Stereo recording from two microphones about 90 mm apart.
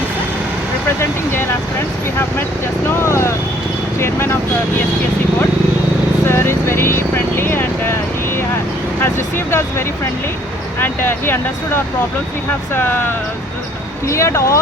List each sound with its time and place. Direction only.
2.8 s speech: 30° left (ahead or behind)
6.2 s speech: 30° left (ahead or behind)
9.0 s speech: 25° left (ahead or behind)